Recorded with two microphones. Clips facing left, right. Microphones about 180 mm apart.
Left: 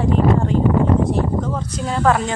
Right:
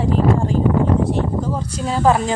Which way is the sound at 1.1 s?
30° right (ahead or behind).